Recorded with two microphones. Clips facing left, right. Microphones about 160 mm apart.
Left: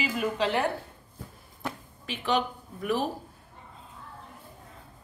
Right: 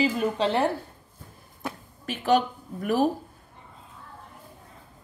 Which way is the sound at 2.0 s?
45° right (ahead or behind).